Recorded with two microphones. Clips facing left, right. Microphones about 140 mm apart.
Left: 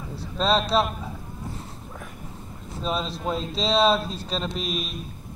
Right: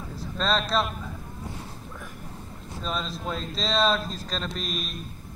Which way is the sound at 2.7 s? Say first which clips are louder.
Left 4 dB; 5° left (ahead or behind).